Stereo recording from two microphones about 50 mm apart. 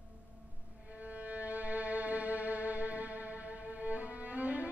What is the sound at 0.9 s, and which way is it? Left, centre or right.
Music, right.